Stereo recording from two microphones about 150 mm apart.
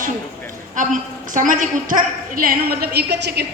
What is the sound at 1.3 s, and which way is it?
A woman's voice, 60° right (ahead or behind).